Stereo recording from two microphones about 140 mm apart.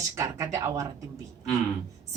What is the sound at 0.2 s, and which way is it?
Speech, 20° right (ahead or behind).